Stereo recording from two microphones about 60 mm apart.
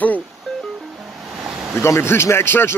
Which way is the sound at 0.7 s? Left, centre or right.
Right.